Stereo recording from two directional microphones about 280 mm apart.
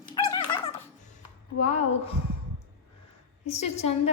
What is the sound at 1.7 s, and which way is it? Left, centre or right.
Speech, left.